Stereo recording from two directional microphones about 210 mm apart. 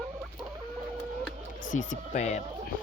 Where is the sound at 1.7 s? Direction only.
40° left (ahead or behind).